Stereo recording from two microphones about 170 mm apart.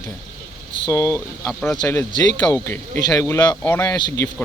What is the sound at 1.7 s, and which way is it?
Speech, 15° left (ahead or behind).